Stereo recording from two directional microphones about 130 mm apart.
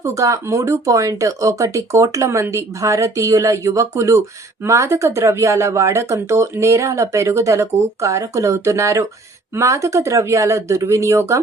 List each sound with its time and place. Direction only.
0.0 s speech: 25° right (ahead or behind)